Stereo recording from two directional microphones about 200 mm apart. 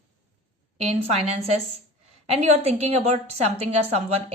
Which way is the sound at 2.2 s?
35° right (ahead or behind).